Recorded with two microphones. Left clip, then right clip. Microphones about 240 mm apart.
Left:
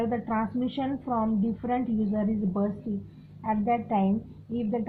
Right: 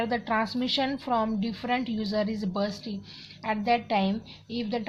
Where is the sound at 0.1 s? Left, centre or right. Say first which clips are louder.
Right 2 dB; right.